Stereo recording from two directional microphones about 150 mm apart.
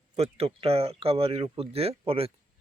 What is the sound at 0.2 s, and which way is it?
Speech, 40° right (ahead or behind).